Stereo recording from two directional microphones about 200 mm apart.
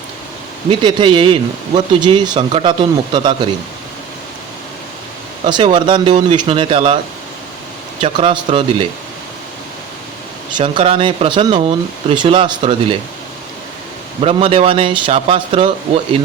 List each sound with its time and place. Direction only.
0.7 s speech: 25° right (ahead or behind)
5.5 s speech: 25° right (ahead or behind)
8.0 s speech: 25° right (ahead or behind)
10.6 s speech: 25° right (ahead or behind)
14.2 s speech: 30° right (ahead or behind)